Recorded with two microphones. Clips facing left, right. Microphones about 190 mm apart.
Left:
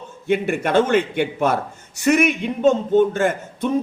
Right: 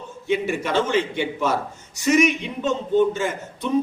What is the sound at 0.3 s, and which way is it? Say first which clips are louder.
A man's voice: left 3 dB; 55° left (ahead or behind).